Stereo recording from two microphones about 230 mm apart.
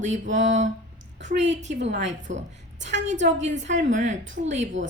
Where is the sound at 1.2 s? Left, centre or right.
Right.